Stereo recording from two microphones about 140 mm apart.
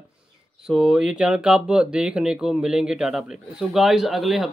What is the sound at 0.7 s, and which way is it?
Speech, 5° right (ahead or behind).